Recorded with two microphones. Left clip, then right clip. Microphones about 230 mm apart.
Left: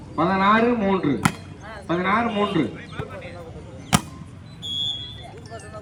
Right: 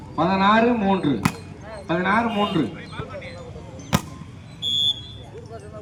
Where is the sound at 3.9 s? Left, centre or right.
Left.